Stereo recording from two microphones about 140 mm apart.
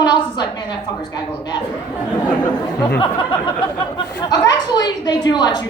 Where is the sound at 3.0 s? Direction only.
35° left (ahead or behind).